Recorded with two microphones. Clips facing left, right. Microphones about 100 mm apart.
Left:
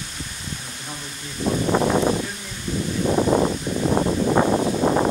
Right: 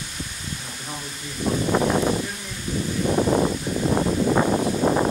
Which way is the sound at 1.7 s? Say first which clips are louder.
Left 2 dB; 20° left (ahead or behind).